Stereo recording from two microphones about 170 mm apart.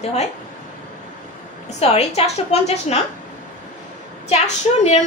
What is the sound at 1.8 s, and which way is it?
A woman's voice, 35° left (ahead or behind).